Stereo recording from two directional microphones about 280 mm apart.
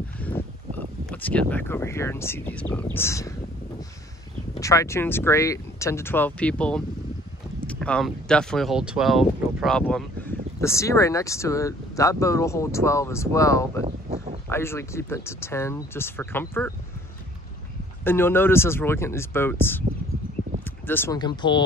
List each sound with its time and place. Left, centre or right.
0.2 s a sound: centre
1.1 s speech: centre
4.6 s speech: centre
13.8 s a sound: right
14.5 s speech: centre
18.0 s speech: centre
20.8 s speech: centre